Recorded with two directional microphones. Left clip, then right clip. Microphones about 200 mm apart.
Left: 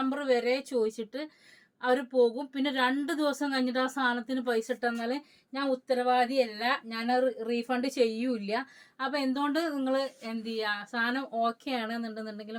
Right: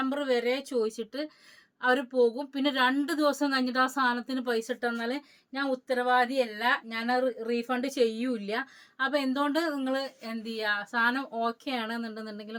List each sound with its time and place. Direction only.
0.0 s a woman's voice: 20° right (ahead or behind)